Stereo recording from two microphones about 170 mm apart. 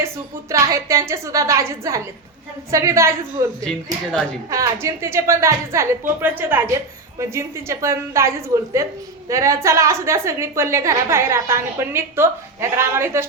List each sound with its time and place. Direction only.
0.5 s a woman's voice: 20° right (ahead or behind)
4.1 s a woman's voice: 5° left (ahead or behind)
4.5 s a woman's voice: 20° right (ahead or behind)